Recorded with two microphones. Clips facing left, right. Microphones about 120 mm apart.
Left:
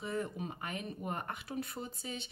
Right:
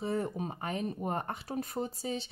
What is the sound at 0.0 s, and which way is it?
Speech, 35° right (ahead or behind).